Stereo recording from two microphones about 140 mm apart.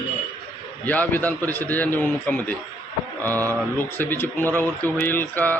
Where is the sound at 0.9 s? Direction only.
10° left (ahead or behind).